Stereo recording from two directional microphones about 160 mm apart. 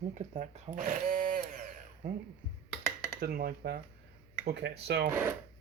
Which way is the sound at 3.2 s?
70° right (ahead or behind).